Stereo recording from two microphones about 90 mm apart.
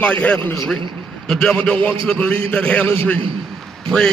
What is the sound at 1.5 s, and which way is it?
A man's voice, 15° left (ahead or behind).